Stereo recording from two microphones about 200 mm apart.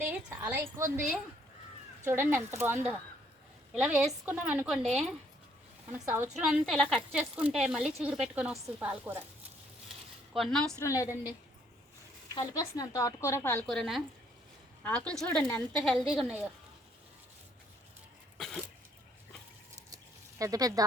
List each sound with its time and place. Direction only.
0.3 s a woman's voice: 15° right (ahead or behind)
5.9 s a woman's voice: 10° right (ahead or behind)
10.3 s speech: centre (ahead or behind)
10.8 s speech: 15° left (ahead or behind)
12.3 s speech: 20° left (ahead or behind)
13.7 s speech: centre (ahead or behind)
18.3 s cough: centre (ahead or behind)
20.4 s a woman's voice: 15° right (ahead or behind)